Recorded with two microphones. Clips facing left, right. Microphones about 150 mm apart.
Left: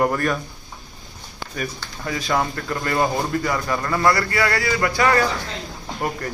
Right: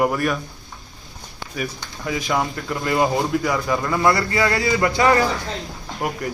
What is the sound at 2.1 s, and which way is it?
Speech, 15° right (ahead or behind).